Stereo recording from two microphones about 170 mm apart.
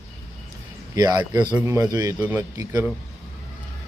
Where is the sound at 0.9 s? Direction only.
20° right (ahead or behind).